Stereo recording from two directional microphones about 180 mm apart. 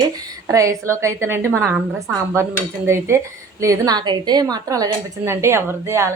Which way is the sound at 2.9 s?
15° right (ahead or behind).